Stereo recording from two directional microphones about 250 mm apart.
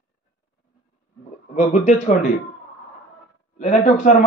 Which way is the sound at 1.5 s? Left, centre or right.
Left.